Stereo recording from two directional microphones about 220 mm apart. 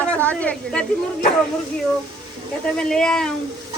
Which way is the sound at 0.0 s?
5° left (ahead or behind).